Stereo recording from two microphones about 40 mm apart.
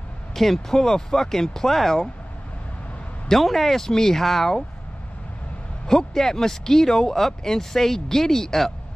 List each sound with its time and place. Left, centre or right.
0.3 s speech: centre
3.3 s speech: centre
5.9 s speech: centre